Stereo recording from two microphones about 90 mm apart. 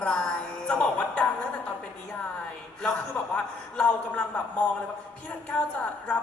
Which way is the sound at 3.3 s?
15° left (ahead or behind).